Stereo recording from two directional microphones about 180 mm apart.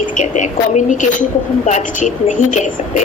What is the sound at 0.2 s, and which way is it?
A woman's voice, 40° left (ahead or behind).